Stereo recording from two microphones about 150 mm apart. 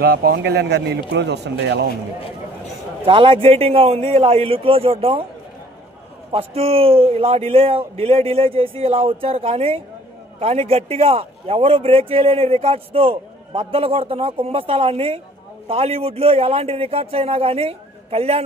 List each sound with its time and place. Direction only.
0.0 s speech: 90° right
3.1 s a man's voice: 35° right (ahead or behind)
6.3 s a man's voice: 40° right (ahead or behind)